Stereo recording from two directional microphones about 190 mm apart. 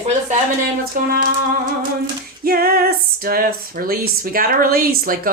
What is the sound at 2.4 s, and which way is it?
Speech, 50° right (ahead or behind).